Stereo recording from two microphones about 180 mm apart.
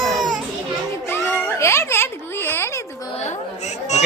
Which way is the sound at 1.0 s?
15° left (ahead or behind).